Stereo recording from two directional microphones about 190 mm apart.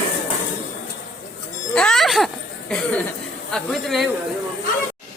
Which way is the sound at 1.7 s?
5° left (ahead or behind).